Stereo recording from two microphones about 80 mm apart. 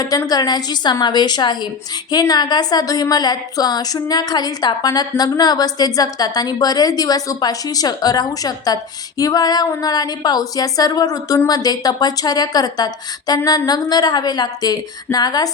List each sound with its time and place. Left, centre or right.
0.3 s speech: left